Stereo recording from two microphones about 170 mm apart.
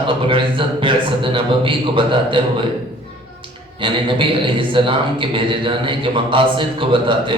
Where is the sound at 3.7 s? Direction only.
30° right (ahead or behind).